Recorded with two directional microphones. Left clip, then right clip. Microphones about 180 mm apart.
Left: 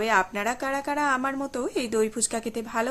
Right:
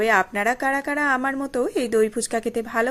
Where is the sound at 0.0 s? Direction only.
25° right (ahead or behind).